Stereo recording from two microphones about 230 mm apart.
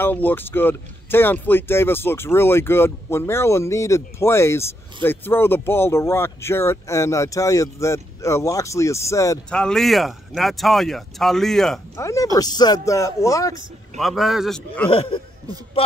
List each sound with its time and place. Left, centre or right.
0.0 s speech: centre
12.0 s speech: centre
13.9 s a man's voice: centre
14.9 s speech: left